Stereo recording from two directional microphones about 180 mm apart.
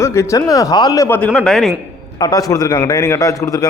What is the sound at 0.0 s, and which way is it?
Speech, 15° left (ahead or behind).